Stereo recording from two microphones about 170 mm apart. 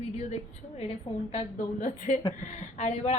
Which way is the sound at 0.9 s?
40° left (ahead or behind).